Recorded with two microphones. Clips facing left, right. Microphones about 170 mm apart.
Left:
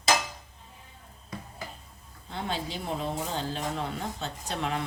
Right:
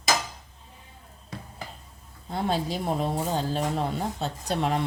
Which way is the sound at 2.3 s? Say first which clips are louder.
Right 6 dB; 40° right (ahead or behind).